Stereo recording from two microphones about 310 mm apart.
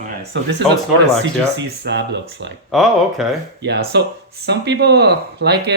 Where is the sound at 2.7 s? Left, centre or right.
Centre.